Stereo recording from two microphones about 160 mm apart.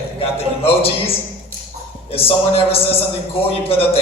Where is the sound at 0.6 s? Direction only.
35° left (ahead or behind).